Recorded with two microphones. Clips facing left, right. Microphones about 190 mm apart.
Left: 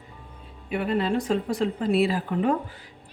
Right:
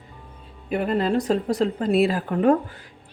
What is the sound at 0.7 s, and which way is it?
A woman's voice, 40° right (ahead or behind).